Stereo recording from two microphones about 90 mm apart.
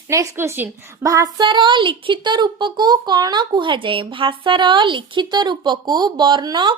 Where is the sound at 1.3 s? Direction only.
55° right (ahead or behind).